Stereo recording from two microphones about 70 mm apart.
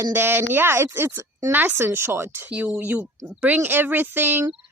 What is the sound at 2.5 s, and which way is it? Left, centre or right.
Speech, centre.